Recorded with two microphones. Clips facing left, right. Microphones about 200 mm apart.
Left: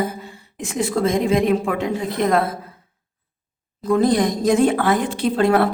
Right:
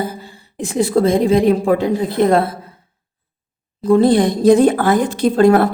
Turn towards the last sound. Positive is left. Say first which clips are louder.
# right 5 dB
turn(degrees=-45)  # may be behind; listen again after turning